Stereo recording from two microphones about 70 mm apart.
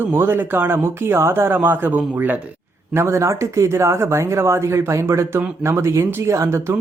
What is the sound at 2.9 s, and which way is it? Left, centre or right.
Speech, right.